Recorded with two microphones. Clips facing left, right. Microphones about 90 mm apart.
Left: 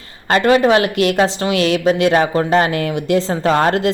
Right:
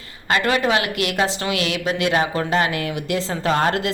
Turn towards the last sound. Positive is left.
turn(degrees=35)  # may be behind; listen again after turning